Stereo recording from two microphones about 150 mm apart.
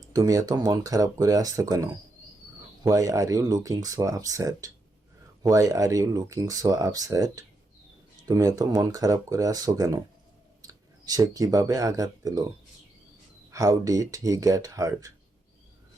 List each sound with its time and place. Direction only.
0.1 s speech: 25° right (ahead or behind)